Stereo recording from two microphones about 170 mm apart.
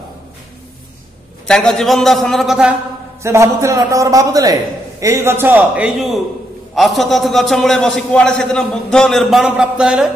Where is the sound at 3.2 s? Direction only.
15° right (ahead or behind).